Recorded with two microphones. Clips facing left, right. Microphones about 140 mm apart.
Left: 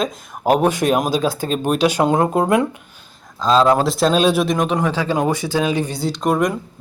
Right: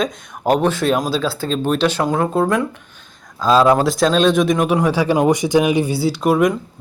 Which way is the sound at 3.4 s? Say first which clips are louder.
Right 1 dB; 5° right (ahead or behind).